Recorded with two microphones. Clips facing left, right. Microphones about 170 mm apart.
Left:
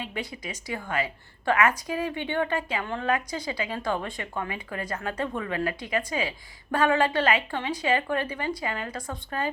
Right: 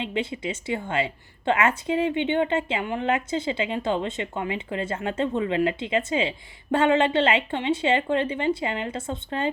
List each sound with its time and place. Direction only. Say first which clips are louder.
0.0 s a woman's voice: right 6 dB; 25° right (ahead or behind)